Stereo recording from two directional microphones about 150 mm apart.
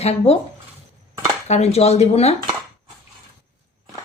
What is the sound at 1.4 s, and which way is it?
Speech, 45° left (ahead or behind).